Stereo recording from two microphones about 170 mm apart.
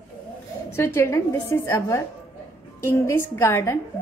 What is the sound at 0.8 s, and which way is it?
A woman's voice, 15° left (ahead or behind).